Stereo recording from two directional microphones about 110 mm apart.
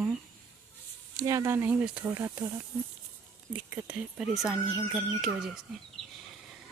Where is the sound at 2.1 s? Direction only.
25° right (ahead or behind).